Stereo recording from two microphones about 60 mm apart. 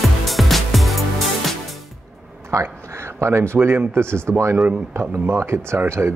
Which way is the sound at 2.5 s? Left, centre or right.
Right.